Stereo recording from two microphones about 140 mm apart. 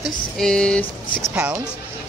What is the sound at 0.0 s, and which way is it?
Speech, 5° left (ahead or behind).